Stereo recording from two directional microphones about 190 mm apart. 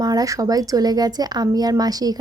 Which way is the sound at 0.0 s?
20° right (ahead or behind).